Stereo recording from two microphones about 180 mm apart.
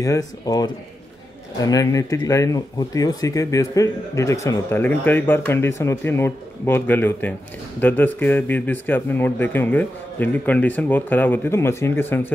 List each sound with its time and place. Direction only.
0.0 s speech: 20° left (ahead or behind)